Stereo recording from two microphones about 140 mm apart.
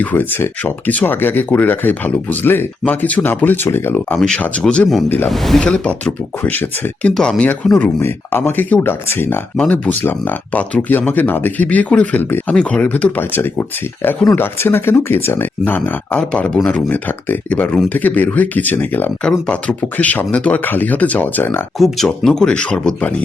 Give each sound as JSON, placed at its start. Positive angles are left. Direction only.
{"t": 0.0, "sound": "speech", "side_deg": 15}
{"t": 5.3, "sound": "speech", "side_deg": 0}
{"t": 21.8, "sound": "speech", "side_deg": 0}